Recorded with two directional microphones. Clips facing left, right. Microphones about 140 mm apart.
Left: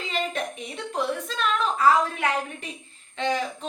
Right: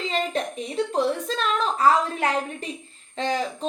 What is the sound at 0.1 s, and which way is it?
A woman's voice, 35° right (ahead or behind).